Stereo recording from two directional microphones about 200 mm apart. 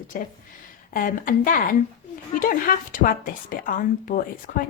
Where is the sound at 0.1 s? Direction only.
45° left (ahead or behind).